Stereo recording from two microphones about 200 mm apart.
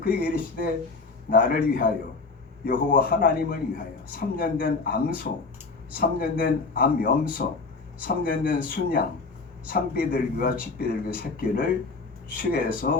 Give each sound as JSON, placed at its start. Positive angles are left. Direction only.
{"t": 0.0, "sound": "speech", "side_deg": 45}